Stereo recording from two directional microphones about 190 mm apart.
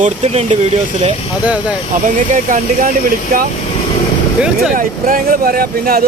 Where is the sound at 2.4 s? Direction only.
45° right (ahead or behind).